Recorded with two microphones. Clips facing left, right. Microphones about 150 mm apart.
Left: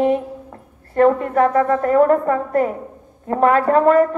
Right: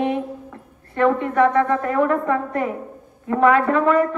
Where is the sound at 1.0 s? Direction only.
40° left (ahead or behind).